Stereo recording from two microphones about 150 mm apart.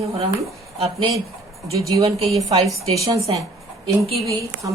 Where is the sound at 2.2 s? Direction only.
40° right (ahead or behind).